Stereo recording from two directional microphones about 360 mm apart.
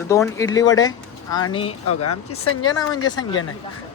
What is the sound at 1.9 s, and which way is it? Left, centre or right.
Speech, left.